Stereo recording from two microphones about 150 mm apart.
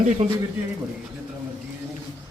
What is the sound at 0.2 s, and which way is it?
Speech, 55° right (ahead or behind).